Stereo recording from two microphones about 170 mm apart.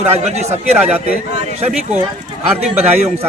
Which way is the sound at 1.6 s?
40° right (ahead or behind).